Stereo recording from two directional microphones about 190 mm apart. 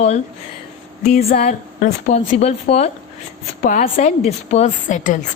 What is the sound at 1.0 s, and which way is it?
A woman's voice, 40° left (ahead or behind).